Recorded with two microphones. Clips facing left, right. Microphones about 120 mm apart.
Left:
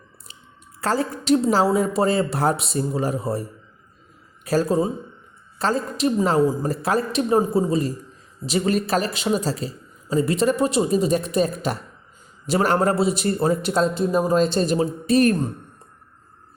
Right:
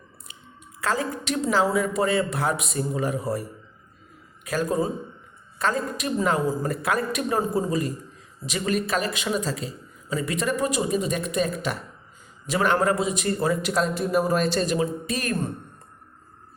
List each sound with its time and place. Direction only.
0.8 s a man's voice: 35° left (ahead or behind)
4.4 s a man's voice: 35° left (ahead or behind)